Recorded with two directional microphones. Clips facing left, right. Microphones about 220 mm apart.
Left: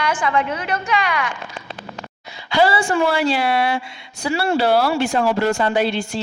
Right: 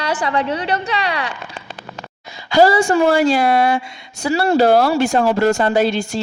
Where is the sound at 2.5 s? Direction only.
45° right (ahead or behind).